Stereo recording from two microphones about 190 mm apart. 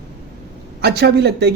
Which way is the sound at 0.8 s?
60° right (ahead or behind).